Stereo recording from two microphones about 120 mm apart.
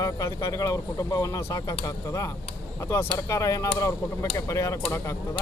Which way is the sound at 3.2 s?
25° left (ahead or behind).